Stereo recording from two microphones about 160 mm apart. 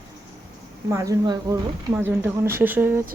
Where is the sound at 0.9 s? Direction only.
20° right (ahead or behind).